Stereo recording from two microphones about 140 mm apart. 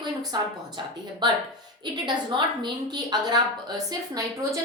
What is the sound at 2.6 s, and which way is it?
A woman's voice, 30° right (ahead or behind).